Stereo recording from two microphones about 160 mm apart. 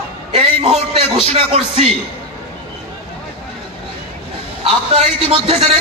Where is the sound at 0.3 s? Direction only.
40° right (ahead or behind).